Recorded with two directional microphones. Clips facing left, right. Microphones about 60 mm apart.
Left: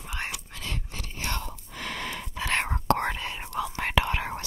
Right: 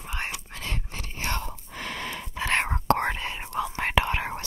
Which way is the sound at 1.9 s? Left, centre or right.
Centre.